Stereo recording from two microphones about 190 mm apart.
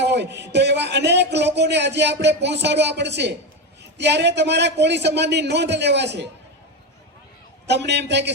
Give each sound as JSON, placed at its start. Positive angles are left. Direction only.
{"t": 0.0, "sound": "a man's voice", "side_deg": -65}
{"t": 7.7, "sound": "a man's voice", "side_deg": -65}